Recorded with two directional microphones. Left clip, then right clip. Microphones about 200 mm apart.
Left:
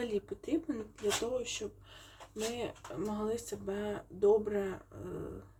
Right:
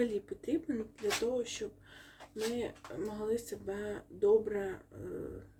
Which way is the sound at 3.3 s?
60° right (ahead or behind).